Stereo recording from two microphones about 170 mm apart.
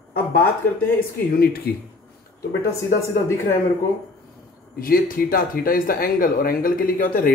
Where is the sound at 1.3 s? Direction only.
65° left (ahead or behind).